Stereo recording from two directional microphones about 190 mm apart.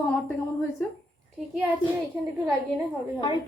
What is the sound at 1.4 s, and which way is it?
Speech, centre (ahead or behind).